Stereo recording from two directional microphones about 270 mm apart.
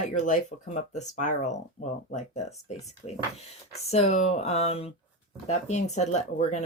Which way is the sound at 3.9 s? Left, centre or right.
Left.